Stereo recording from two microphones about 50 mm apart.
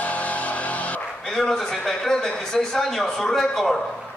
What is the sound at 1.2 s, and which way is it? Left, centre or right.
A man's voice, centre.